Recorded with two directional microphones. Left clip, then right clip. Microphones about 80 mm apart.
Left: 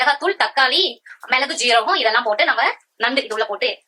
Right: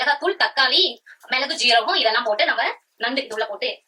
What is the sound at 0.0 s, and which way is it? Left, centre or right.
A woman's voice, left.